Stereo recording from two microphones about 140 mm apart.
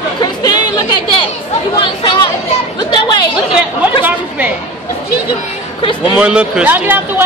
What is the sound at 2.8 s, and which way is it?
Speech, 30° left (ahead or behind).